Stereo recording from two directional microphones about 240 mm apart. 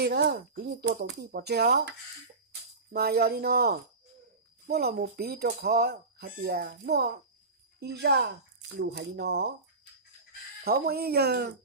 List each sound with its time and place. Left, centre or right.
0.0 s speech: right
10.6 s speech: right